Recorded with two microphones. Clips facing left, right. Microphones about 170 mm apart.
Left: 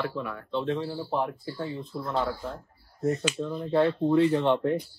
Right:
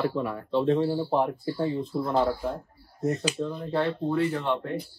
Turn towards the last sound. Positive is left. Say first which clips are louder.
# left 4 dB
turn(degrees=20)  # may be behind; listen again after turning